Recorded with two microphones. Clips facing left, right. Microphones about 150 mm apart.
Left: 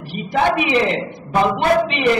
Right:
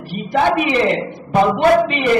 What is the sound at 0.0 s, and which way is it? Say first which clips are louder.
A man's voice: right 1 dB; 45° right (ahead or behind).